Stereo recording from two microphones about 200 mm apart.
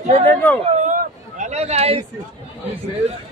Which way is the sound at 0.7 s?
40° right (ahead or behind).